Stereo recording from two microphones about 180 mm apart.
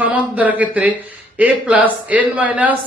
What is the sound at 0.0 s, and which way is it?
Speech, 10° right (ahead or behind).